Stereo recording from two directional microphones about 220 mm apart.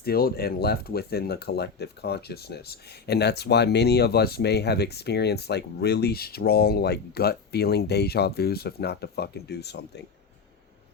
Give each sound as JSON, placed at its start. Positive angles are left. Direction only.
{"t": 0.0, "sound": "speech", "side_deg": 45}